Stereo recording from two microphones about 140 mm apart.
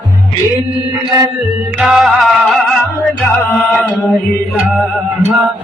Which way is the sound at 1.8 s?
5° right (ahead or behind).